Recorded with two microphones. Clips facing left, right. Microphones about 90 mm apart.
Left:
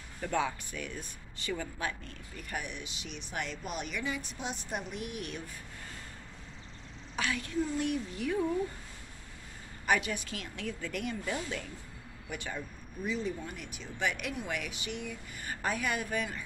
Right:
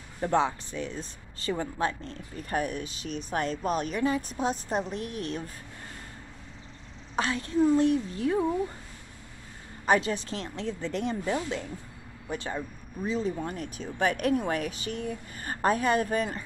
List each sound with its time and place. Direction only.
0.2 s speech: 25° right (ahead or behind)
7.2 s speech: 30° right (ahead or behind)
9.8 s speech: 30° right (ahead or behind)